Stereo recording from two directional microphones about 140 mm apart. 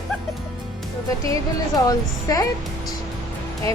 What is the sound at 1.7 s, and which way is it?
Speech, 25° left (ahead or behind).